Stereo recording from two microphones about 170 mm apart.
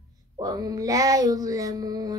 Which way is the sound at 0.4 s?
20° right (ahead or behind).